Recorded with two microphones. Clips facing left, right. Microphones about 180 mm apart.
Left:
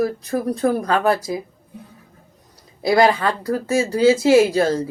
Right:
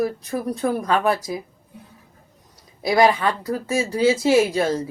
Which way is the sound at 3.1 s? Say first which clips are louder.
Left 2 dB; 35° left (ahead or behind).